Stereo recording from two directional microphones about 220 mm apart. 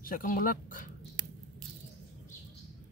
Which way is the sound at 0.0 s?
40° left (ahead or behind).